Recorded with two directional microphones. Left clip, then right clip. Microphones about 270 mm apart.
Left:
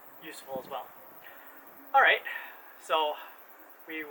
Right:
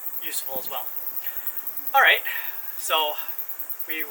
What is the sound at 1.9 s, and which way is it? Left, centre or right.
Speech, centre.